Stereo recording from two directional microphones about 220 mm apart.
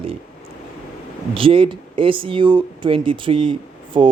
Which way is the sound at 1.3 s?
25° right (ahead or behind).